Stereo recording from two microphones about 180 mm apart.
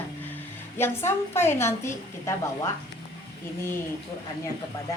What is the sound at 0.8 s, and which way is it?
A woman's voice, 15° left (ahead or behind).